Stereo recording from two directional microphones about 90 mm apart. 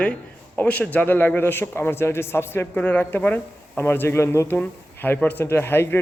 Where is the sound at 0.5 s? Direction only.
15° left (ahead or behind).